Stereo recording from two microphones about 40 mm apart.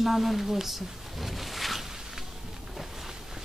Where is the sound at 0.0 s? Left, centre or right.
Centre.